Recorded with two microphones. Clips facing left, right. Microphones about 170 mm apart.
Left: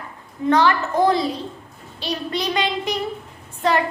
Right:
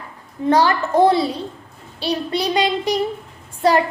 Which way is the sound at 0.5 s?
35° right (ahead or behind).